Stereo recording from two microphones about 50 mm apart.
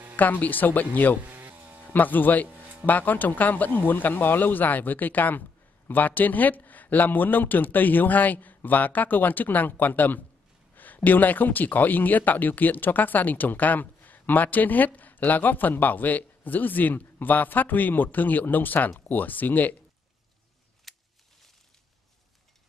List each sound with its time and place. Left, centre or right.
0.1 s speech: left
1.2 s insect: right
1.9 s speech: left
2.4 s music: right
2.9 s speech: left
20.9 s a sound: centre